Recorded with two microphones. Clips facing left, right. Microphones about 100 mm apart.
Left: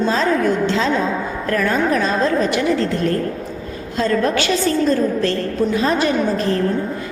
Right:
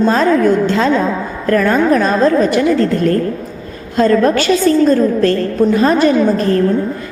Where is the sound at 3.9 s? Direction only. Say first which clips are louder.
Right 7 dB; 45° right (ahead or behind).